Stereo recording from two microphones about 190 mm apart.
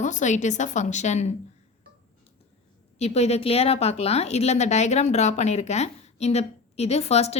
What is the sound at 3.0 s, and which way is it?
A woman's voice, 35° left (ahead or behind).